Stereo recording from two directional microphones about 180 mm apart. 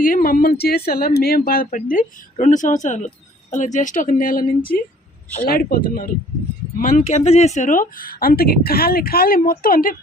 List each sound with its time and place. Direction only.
0.0 s speech: 50° left (ahead or behind)